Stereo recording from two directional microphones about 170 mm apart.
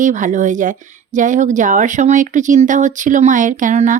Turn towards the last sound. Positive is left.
turn(degrees=-45)  # may be behind; listen again after turning